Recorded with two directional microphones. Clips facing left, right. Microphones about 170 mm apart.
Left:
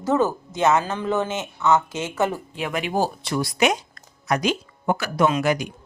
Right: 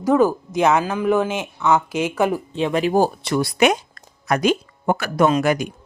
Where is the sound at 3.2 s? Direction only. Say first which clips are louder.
Right 4 dB; 65° right (ahead or behind).